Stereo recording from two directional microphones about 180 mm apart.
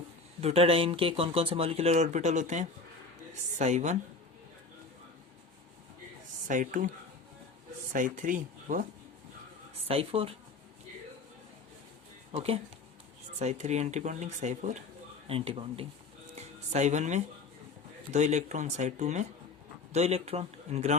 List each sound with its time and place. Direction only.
0.4 s speech: 35° right (ahead or behind)
6.5 s speech: 45° right (ahead or behind)
7.9 s speech: 45° right (ahead or behind)
9.8 s speech: 35° right (ahead or behind)
12.3 s speech: 35° right (ahead or behind)
15.3 s speech: 30° right (ahead or behind)
16.3 s music: 40° right (ahead or behind)
18.1 s speech: 40° right (ahead or behind)